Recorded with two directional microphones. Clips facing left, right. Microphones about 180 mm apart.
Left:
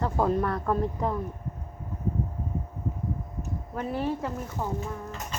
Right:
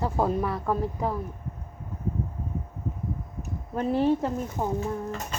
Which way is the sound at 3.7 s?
25° right (ahead or behind).